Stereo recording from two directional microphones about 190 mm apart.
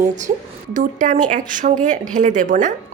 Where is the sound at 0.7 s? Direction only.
40° right (ahead or behind).